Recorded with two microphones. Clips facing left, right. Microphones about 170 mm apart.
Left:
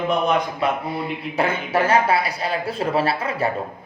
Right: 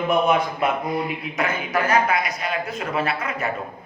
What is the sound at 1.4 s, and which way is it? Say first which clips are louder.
A man's voice: left 3 dB; 30° left (ahead or behind).